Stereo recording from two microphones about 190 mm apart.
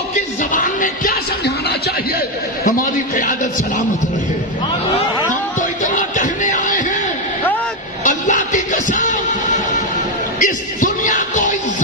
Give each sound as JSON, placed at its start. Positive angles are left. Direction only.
{"t": 0.4, "sound": "speech", "side_deg": 45}
{"t": 2.1, "sound": "a man's voice", "side_deg": 45}
{"t": 4.9, "sound": "a sound", "side_deg": 40}
{"t": 8.0, "sound": "music", "side_deg": 40}
{"t": 10.4, "sound": "music", "side_deg": 40}